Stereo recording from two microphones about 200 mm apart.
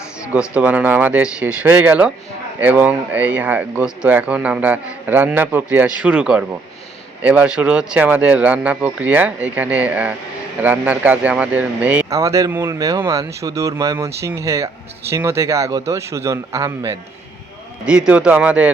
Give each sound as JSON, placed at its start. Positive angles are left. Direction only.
{"t": 0.3, "sound": "speech", "side_deg": -5}
{"t": 17.8, "sound": "speech", "side_deg": -5}